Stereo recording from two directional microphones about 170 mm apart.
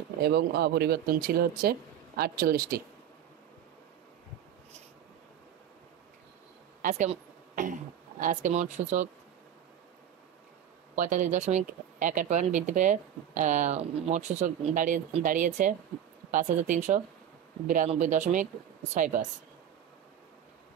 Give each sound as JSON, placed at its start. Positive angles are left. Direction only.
{"t": 0.2, "sound": "speech", "side_deg": -65}
{"t": 6.8, "sound": "speech", "side_deg": -50}
{"t": 11.0, "sound": "speech", "side_deg": -45}